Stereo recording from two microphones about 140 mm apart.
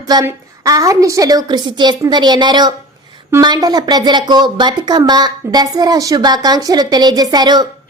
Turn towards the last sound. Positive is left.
turn(degrees=-30)  # may be behind; listen again after turning